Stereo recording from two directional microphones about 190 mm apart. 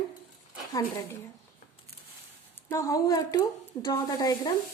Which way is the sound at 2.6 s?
15° left (ahead or behind).